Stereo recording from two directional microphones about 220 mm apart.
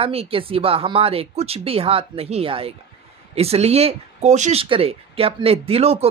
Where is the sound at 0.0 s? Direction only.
25° right (ahead or behind).